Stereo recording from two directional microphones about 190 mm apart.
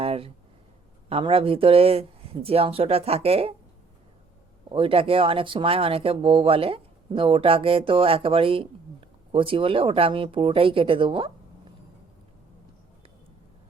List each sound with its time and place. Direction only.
0.0 s a sound: 30° right (ahead or behind)
1.1 s speech: 30° right (ahead or behind)
4.7 s speech: 30° right (ahead or behind)